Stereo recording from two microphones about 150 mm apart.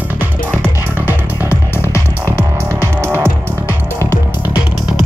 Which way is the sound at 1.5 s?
20° left (ahead or behind).